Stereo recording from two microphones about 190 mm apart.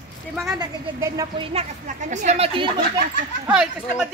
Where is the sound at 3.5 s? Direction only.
5° right (ahead or behind).